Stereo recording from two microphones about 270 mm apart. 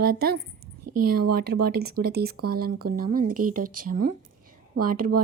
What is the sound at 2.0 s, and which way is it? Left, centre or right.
Speech, right.